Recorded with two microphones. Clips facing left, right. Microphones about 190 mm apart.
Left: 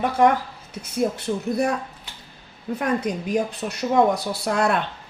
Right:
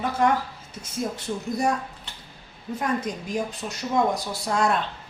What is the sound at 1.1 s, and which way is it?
Speech, 60° left (ahead or behind).